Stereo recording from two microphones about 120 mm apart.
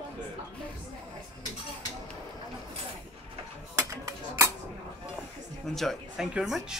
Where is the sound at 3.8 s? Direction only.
25° right (ahead or behind).